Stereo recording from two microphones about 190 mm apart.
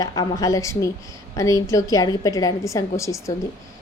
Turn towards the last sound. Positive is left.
turn(degrees=15)  # may be behind; listen again after turning